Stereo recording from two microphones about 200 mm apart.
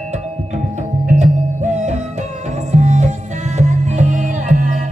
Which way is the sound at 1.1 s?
35° right (ahead or behind).